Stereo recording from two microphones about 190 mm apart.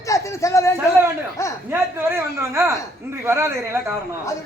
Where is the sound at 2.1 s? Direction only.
15° right (ahead or behind).